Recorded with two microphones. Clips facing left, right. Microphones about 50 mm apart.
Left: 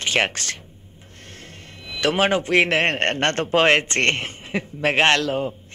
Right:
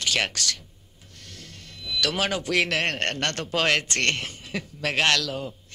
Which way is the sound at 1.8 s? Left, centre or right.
Left.